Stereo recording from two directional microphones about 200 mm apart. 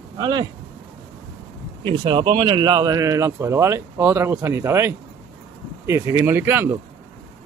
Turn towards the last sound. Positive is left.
turn(degrees=-10)  # may be behind; listen again after turning